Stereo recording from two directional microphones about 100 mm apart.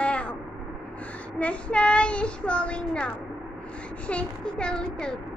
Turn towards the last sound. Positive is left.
turn(degrees=10)  # may be behind; listen again after turning